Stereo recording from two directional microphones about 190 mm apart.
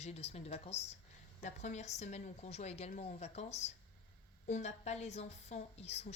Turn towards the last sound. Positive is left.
turn(degrees=35)  # may be behind; listen again after turning